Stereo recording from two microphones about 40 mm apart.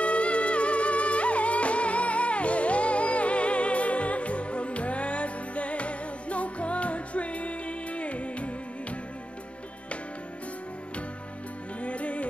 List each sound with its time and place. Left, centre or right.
0.0 s music: left
11.8 s music: left